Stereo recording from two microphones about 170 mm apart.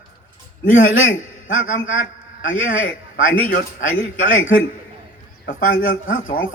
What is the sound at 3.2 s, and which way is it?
Speech, 55° left (ahead or behind).